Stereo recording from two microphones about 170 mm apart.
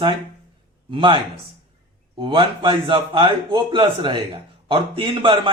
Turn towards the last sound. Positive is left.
turn(degrees=-30)  # may be behind; listen again after turning